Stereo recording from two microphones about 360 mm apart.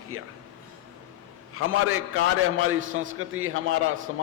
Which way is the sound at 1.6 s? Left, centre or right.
Right.